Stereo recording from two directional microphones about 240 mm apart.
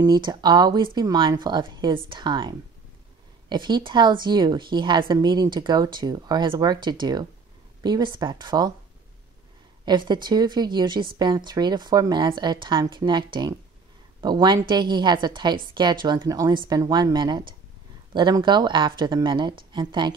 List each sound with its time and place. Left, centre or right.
0.0 s a woman's voice: centre
9.8 s a woman's voice: centre